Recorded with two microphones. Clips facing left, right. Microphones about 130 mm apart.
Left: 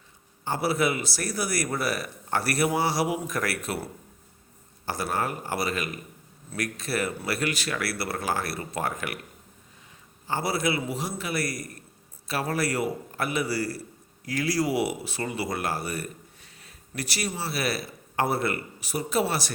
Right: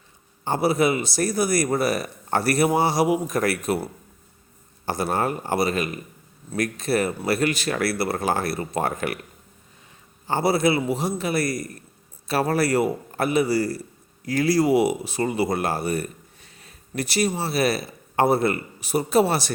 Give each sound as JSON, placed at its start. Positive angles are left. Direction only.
{"t": 0.4, "sound": "speech", "side_deg": -20}
{"t": 4.9, "sound": "speech", "side_deg": -25}
{"t": 10.2, "sound": "speech", "side_deg": -25}
{"t": 16.6, "sound": "a sound", "side_deg": -25}
{"t": 17.4, "sound": "speech", "side_deg": -25}